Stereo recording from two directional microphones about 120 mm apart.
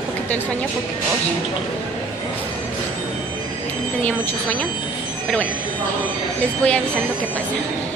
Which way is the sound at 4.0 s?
10° left (ahead or behind).